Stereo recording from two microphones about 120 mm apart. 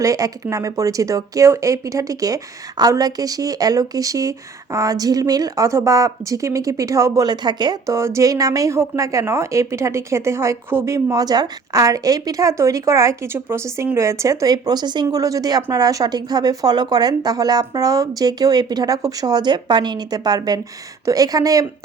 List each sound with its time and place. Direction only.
0.0 s speech: 30° right (ahead or behind)